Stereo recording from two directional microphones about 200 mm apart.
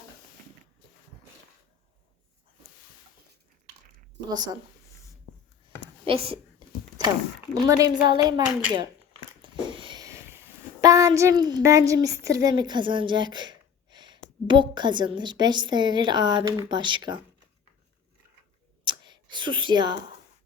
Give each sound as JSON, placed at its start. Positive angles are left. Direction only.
{"t": 4.3, "sound": "a woman's voice", "side_deg": -20}
{"t": 6.1, "sound": "a woman's voice", "side_deg": -30}
{"t": 7.5, "sound": "a woman's voice", "side_deg": -15}
{"t": 9.4, "sound": "a sound", "side_deg": -25}
{"t": 10.8, "sound": "a woman's voice", "side_deg": -15}
{"t": 18.9, "sound": "clicking", "side_deg": -20}